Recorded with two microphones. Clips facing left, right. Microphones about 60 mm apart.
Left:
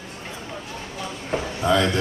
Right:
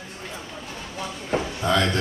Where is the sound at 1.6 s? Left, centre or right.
Centre.